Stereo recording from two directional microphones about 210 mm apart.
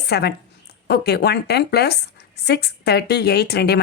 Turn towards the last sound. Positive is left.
turn(degrees=50)  # may be behind; listen again after turning